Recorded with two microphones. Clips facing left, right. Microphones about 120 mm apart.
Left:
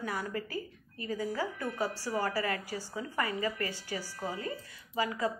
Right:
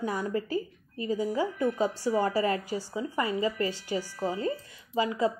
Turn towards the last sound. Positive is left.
turn(degrees=-20)  # may be behind; listen again after turning